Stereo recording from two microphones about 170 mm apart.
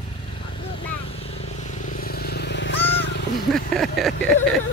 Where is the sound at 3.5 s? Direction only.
Centre (ahead or behind).